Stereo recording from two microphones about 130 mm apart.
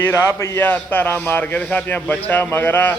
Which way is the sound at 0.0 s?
20° left (ahead or behind).